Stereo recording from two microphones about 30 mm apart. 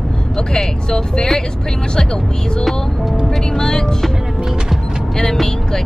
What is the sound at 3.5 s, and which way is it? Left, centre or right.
Speech, left.